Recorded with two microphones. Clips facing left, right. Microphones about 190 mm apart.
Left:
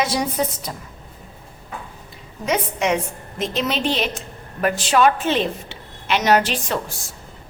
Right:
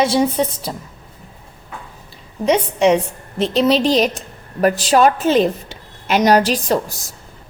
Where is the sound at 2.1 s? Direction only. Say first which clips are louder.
Right 6 dB; 30° right (ahead or behind).